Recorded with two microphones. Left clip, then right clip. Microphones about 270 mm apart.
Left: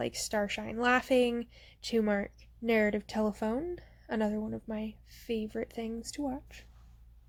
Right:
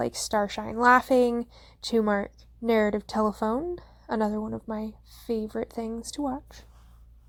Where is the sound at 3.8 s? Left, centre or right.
Centre.